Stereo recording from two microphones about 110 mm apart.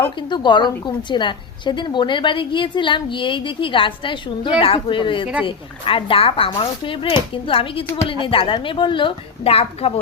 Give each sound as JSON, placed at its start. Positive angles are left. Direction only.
{"t": 0.2, "sound": "a woman's voice", "side_deg": 45}